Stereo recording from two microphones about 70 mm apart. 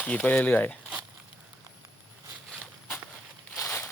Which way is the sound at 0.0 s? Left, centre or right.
Centre.